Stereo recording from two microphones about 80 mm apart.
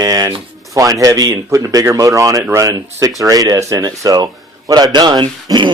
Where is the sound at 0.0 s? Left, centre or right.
Right.